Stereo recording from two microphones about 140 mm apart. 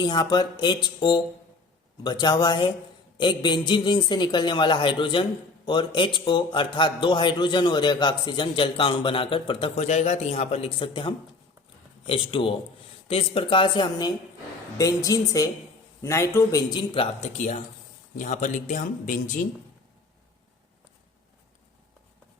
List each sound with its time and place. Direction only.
0.0 s a man's voice: 30° left (ahead or behind)
9.8 s a man's voice: 55° left (ahead or behind); by 16.8 s 25° left (ahead or behind)
16.9 s speech: 45° left (ahead or behind); by 19.5 s 65° left (ahead or behind)